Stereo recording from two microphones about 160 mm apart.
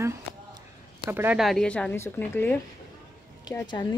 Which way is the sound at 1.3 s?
Centre (ahead or behind).